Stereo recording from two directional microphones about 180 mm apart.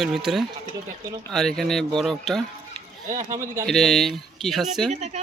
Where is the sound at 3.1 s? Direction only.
45° right (ahead or behind).